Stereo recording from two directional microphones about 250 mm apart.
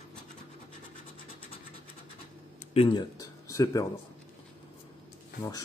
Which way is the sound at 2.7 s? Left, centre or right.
Left.